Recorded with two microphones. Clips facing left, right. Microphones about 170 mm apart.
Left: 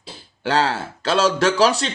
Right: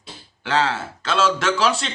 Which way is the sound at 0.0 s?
35° left (ahead or behind).